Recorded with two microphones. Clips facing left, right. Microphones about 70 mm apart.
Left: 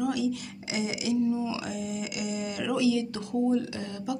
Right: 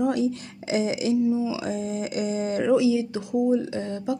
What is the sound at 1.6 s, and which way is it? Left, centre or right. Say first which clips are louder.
Speech: right 5 dB; right.